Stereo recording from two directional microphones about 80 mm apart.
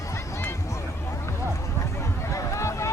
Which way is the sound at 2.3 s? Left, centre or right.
Left.